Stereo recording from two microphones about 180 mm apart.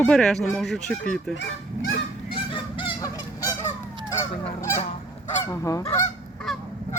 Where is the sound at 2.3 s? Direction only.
25° left (ahead or behind).